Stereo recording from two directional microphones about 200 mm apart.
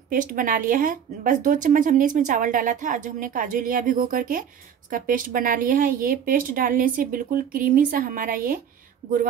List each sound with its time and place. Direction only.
0.1 s speech: 45° right (ahead or behind)